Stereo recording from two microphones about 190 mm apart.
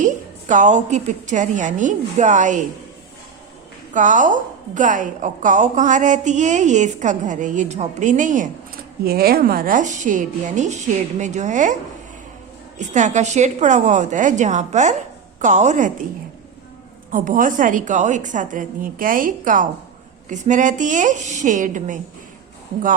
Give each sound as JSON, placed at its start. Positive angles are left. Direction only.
{"t": 0.0, "sound": "a woman's voice", "side_deg": -40}
{"t": 3.9, "sound": "a woman's voice", "side_deg": -40}
{"t": 9.0, "sound": "a woman's voice", "side_deg": -55}
{"t": 12.9, "sound": "a woman's voice", "side_deg": -40}
{"t": 17.1, "sound": "a woman's voice", "side_deg": -45}